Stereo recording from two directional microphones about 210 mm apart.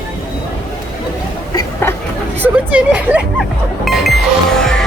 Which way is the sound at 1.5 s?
15° left (ahead or behind).